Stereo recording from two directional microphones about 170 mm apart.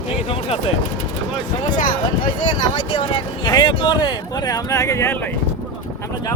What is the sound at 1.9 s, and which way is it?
Speech, 25° left (ahead or behind).